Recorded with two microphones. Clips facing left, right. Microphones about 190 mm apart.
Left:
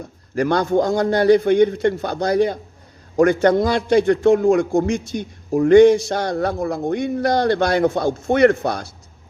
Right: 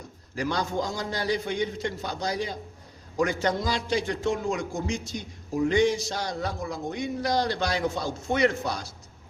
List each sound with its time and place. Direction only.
0.3 s a man's voice: 60° left (ahead or behind)